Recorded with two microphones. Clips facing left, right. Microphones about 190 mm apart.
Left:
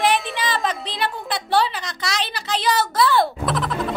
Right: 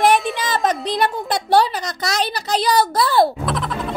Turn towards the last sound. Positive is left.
turn(degrees=0)  # may be behind; listen again after turning